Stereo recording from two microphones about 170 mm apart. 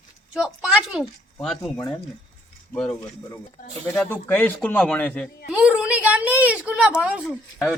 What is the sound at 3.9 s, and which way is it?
A man's voice, 10° left (ahead or behind).